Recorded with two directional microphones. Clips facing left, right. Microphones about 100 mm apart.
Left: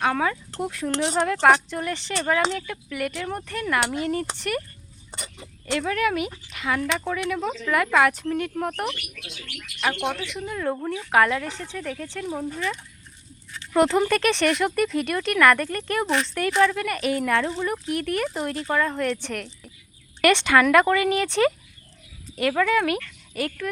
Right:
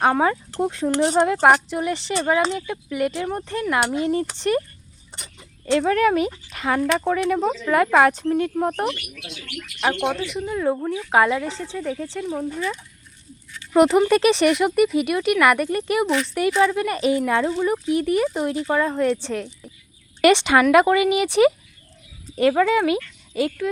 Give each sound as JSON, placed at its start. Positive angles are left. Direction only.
{"t": 0.0, "sound": "speech", "side_deg": -30}
{"t": 5.7, "sound": "speech", "side_deg": -35}
{"t": 10.3, "sound": "speech", "side_deg": -15}
{"t": 13.7, "sound": "speech", "side_deg": -15}
{"t": 22.4, "sound": "speech", "side_deg": -25}